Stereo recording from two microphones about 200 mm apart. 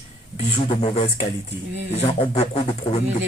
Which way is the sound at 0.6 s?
30° left (ahead or behind).